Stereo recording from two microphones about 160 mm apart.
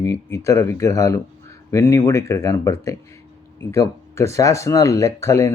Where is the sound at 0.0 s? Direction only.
20° left (ahead or behind).